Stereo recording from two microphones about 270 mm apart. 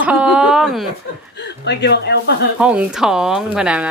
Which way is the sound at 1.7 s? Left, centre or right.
Left.